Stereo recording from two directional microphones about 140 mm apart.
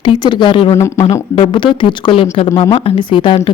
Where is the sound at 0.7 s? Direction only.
20° left (ahead or behind).